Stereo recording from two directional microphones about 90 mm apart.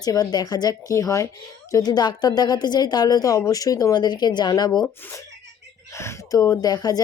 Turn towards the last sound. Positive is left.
turn(degrees=45)  # may be behind; listen again after turning